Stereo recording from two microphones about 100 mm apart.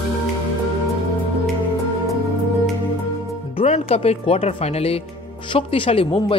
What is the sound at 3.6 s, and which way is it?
Speech, 80° left.